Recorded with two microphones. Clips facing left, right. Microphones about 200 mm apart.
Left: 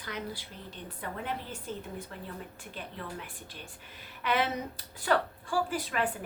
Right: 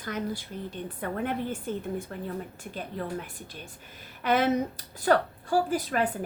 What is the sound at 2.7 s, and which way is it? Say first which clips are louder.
Speech: right 8 dB; 45° right (ahead or behind).